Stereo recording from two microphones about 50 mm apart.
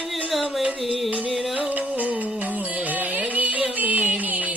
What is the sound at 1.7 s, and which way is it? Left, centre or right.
Music, right.